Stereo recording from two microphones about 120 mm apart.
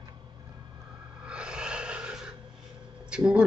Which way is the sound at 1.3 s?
5° right (ahead or behind).